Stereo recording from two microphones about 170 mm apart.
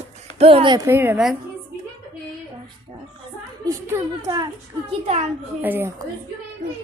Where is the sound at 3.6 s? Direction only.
20° right (ahead or behind).